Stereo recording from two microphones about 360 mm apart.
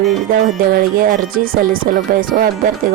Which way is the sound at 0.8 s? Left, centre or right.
Right.